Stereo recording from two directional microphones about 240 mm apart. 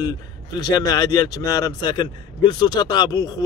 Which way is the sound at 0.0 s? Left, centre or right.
Centre.